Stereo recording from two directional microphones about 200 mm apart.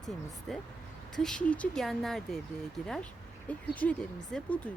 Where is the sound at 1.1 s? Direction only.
5° left (ahead or behind).